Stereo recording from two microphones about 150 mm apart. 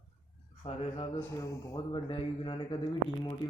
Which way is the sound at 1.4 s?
25° left (ahead or behind).